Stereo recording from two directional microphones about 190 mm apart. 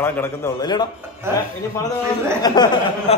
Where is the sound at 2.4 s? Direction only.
20° left (ahead or behind).